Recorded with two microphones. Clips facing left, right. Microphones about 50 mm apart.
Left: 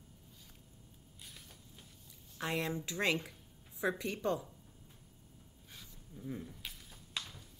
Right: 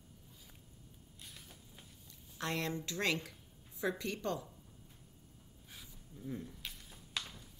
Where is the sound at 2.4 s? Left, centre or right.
Centre.